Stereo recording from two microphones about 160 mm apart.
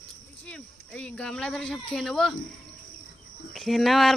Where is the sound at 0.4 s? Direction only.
5° left (ahead or behind).